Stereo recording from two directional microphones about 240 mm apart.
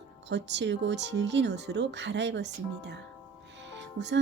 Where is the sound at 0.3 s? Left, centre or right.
Right.